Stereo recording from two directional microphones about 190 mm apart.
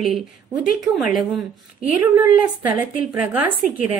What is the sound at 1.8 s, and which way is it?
A woman's voice, 10° right (ahead or behind).